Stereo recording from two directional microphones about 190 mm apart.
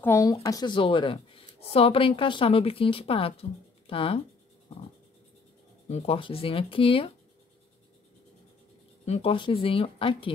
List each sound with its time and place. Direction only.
0.0 s speech: 15° left (ahead or behind)
5.9 s speech: 35° left (ahead or behind)
9.0 s speech: 30° left (ahead or behind)